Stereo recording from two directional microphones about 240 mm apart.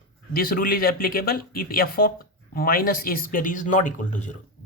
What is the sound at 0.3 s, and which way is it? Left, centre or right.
Speech, left.